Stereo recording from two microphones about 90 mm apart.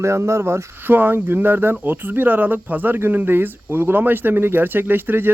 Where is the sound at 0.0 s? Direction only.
30° right (ahead or behind).